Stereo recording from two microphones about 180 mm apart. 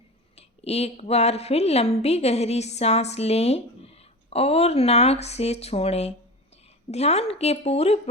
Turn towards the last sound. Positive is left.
turn(degrees=35)  # may be behind; listen again after turning